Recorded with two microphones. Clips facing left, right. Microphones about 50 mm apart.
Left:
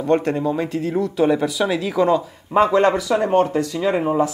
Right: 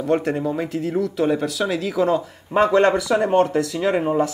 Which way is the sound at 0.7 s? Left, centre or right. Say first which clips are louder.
Left 1 dB; centre.